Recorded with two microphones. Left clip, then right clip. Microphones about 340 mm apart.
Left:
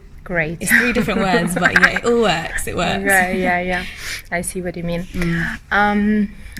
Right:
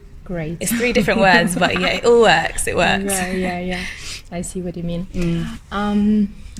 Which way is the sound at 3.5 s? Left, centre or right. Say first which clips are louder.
Left 7 dB; left.